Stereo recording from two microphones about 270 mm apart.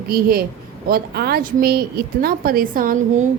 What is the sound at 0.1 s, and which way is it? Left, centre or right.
A woman's voice, right.